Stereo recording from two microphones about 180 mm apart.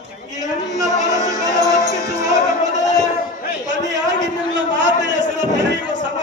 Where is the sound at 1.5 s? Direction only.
20° right (ahead or behind).